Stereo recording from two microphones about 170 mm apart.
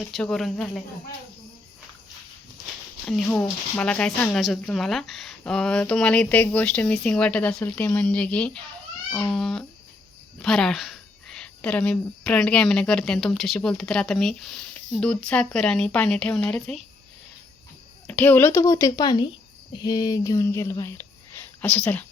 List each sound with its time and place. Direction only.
0.1 s speech: 5° left (ahead or behind)
3.1 s speech: 5° left (ahead or behind)
18.1 s a woman's voice: 10° left (ahead or behind)